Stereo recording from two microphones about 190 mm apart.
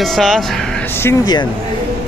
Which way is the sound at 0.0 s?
Centre (ahead or behind).